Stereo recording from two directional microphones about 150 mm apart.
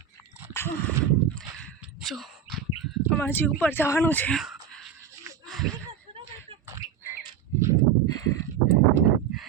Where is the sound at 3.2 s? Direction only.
15° left (ahead or behind).